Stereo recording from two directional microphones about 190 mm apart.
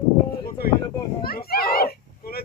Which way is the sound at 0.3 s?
50° left (ahead or behind).